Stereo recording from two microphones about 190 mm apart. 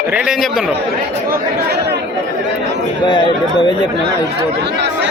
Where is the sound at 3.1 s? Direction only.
25° left (ahead or behind).